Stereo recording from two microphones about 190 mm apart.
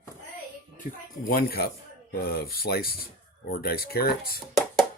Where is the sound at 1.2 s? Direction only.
50° left (ahead or behind).